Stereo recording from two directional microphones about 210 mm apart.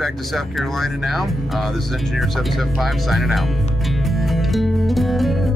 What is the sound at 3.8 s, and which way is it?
Music, centre (ahead or behind).